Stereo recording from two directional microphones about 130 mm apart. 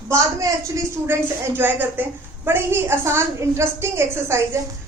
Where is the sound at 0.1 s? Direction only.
25° right (ahead or behind).